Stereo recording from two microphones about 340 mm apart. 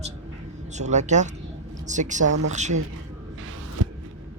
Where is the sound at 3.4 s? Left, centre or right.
Right.